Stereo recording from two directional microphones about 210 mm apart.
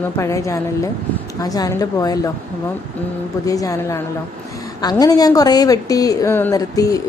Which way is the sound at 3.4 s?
15° left (ahead or behind).